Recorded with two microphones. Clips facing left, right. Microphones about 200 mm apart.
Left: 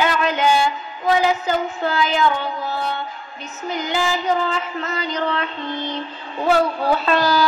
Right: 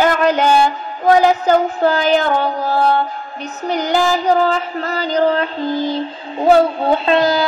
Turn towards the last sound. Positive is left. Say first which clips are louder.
# right 4 dB
turn(degrees=-25)  # may be behind; listen again after turning